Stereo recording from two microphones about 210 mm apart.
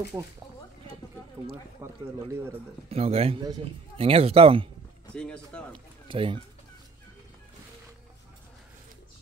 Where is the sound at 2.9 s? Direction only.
30° right (ahead or behind).